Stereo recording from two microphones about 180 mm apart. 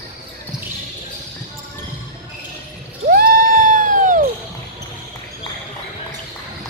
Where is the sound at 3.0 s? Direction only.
55° right (ahead or behind).